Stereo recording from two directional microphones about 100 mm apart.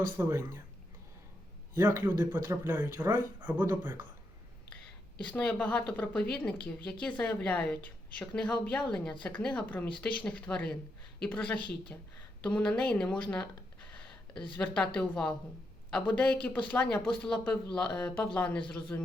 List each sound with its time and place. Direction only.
0.0 s a man's voice: 25° right (ahead or behind)
1.7 s a man's voice: 25° right (ahead or behind)
5.3 s a woman's voice: 10° left (ahead or behind)
14.5 s a woman's voice: 15° left (ahead or behind)